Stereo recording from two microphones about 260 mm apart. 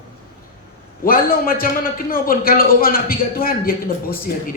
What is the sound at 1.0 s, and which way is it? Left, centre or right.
A man's voice, left.